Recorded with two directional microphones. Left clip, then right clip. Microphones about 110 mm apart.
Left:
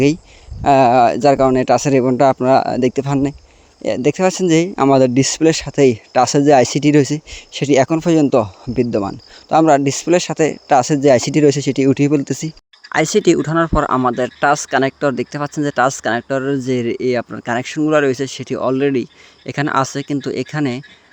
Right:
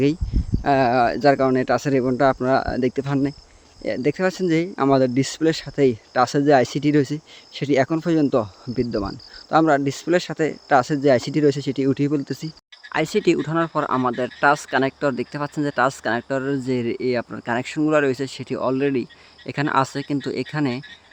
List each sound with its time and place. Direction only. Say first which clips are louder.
0.6 s speech: left 7 dB; 60° left (ahead or behind)
9.5 s speech: left 6 dB; 65° left (ahead or behind)
12.9 s speech: left 6 dB; 60° left (ahead or behind); by 20.8 s 35° left (ahead or behind)